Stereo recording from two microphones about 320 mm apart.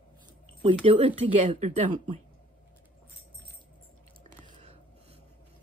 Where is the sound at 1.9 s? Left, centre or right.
Right.